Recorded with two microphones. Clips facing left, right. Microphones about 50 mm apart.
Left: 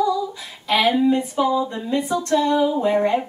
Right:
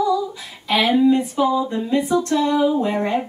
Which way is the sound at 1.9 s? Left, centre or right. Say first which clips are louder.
Right 3 dB; right.